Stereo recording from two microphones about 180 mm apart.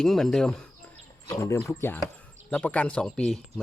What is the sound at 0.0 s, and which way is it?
Speech, centre (ahead or behind).